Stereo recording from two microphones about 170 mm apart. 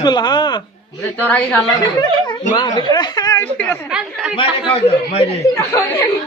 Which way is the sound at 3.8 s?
5° right (ahead or behind).